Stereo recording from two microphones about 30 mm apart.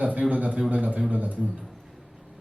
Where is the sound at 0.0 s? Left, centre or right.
Right.